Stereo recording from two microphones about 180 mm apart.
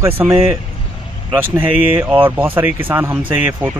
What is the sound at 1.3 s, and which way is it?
Speech, 10° right (ahead or behind).